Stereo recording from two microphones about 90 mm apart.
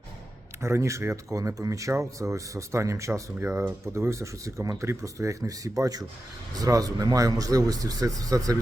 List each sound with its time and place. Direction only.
0.6 s speech: 30° right (ahead or behind)